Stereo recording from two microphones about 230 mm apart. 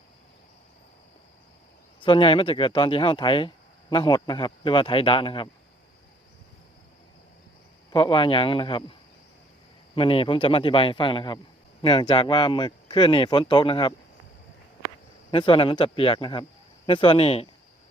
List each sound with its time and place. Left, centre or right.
2.0 s speech: left
7.9 s speech: left
9.9 s speech: left
15.3 s speech: left